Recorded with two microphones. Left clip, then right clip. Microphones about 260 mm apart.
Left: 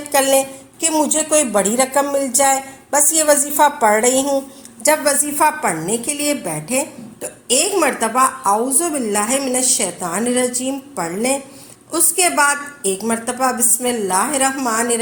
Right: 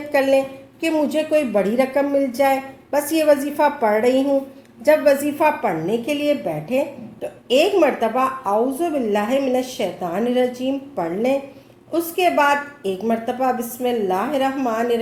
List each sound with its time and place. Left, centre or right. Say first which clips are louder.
0.9 s a woman's voice: left 2 dB; left